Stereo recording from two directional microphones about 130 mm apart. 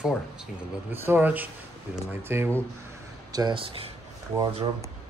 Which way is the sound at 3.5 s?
45° right (ahead or behind).